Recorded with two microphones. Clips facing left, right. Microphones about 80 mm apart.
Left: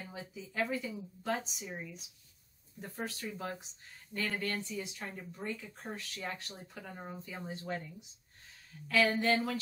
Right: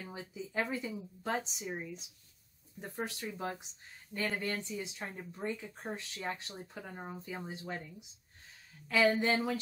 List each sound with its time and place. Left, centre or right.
0.1 s speech: right
8.8 s speech: centre